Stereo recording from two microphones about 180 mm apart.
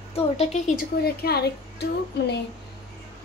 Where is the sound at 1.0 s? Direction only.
60° left (ahead or behind).